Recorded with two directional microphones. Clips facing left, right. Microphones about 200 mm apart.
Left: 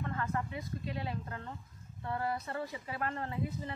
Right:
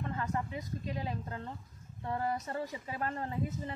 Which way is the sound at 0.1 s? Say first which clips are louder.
Even; 20° right (ahead or behind).